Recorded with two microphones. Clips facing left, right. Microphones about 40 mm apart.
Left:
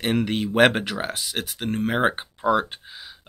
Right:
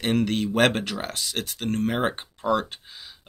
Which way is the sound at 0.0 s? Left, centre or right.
Centre.